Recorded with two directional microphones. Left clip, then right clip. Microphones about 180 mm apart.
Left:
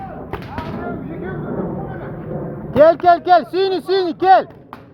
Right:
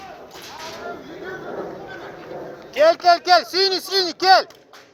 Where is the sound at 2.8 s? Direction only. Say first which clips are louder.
Left 4 dB; 15° left (ahead or behind).